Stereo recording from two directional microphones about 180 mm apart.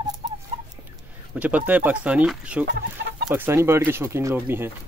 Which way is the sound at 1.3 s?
10° right (ahead or behind).